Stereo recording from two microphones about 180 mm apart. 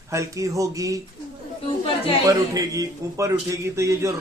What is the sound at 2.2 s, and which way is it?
A man's voice, 20° right (ahead or behind).